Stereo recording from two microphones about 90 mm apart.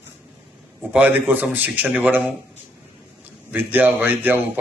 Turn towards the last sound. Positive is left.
turn(degrees=-20)  # may be behind; listen again after turning